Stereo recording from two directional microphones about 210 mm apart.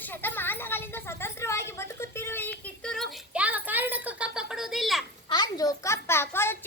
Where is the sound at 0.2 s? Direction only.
10° left (ahead or behind).